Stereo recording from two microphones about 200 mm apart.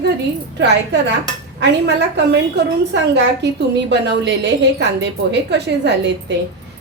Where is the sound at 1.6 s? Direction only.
60° right (ahead or behind).